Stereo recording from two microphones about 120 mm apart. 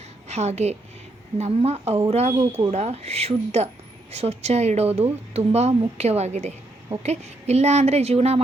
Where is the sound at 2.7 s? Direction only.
60° right (ahead or behind).